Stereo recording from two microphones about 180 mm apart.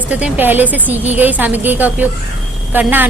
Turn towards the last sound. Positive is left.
turn(degrees=-10)  # may be behind; listen again after turning